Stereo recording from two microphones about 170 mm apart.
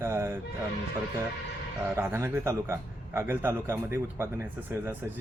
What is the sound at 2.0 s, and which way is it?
Speech, 15° right (ahead or behind).